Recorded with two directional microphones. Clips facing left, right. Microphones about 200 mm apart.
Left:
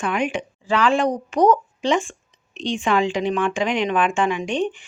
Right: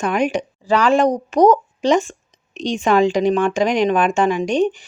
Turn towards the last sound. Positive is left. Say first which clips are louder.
# right 5 dB
turn(degrees=-40)  # may be behind; listen again after turning